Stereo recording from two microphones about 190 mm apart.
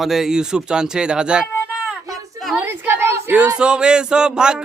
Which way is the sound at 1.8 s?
5° right (ahead or behind).